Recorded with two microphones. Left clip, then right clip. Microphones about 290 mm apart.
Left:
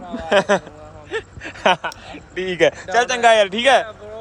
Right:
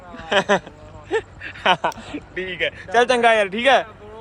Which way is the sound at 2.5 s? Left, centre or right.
Left.